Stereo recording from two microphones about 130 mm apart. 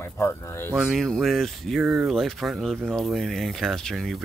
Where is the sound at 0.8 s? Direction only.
Centre (ahead or behind).